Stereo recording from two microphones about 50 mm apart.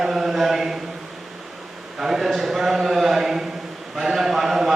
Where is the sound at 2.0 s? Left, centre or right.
Centre.